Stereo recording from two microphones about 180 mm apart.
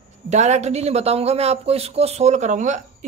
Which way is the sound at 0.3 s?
40° right (ahead or behind).